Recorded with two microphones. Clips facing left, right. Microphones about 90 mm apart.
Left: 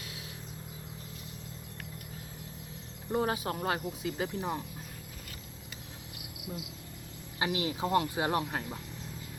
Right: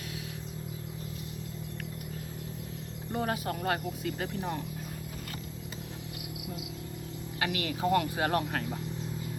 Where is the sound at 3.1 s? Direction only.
15° left (ahead or behind).